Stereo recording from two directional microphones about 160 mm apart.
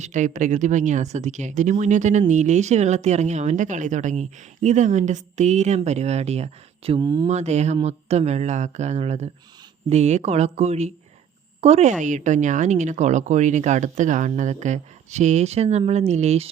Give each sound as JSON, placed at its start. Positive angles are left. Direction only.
{"t": 0.0, "sound": "speech", "side_deg": -50}
{"t": 7.0, "sound": "speech", "side_deg": -25}
{"t": 7.3, "sound": "speech", "side_deg": -45}